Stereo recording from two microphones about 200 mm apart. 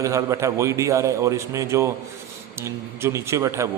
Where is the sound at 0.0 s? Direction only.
15° right (ahead or behind).